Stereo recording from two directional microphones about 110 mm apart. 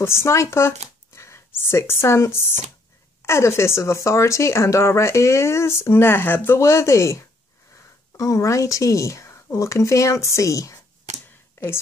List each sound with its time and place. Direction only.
0.0 s speech: 25° left (ahead or behind)
11.1 s a sound: 90° right
11.6 s speech: 20° left (ahead or behind)